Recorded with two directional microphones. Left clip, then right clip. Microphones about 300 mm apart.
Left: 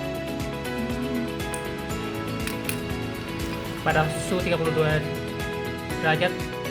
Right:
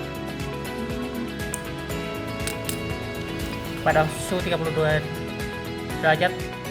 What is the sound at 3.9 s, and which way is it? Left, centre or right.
Speech, centre.